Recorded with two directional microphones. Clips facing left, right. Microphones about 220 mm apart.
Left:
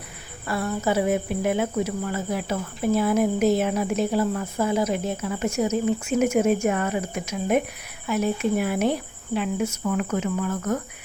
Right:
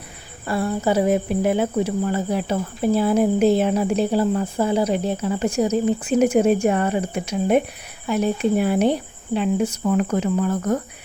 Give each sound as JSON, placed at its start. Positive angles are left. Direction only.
{"t": 0.4, "sound": "speech", "side_deg": -30}